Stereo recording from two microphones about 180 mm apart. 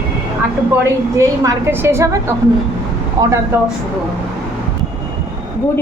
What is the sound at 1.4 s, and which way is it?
Speech, 15° right (ahead or behind).